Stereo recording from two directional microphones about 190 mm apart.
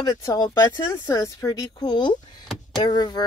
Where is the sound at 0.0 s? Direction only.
20° left (ahead or behind).